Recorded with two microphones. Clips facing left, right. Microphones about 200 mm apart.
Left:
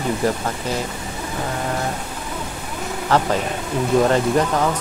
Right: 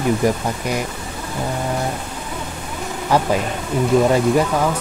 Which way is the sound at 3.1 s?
10° right (ahead or behind).